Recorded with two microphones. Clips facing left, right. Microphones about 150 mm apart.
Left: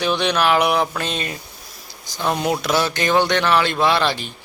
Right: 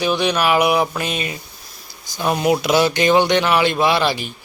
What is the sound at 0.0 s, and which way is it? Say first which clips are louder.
A man's voice: right 1 dB; 10° right (ahead or behind).